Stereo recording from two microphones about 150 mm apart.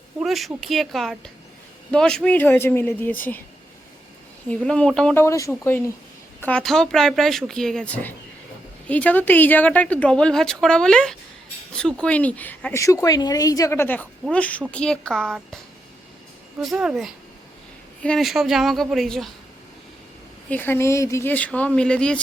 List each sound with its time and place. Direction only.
0.2 s speech: centre (ahead or behind)
4.4 s speech: 5° left (ahead or behind)
5.1 s speech: 20° left (ahead or behind)
6.4 s speech: 5° left (ahead or behind)
16.6 s speech: centre (ahead or behind)
20.5 s speech: 15° left (ahead or behind)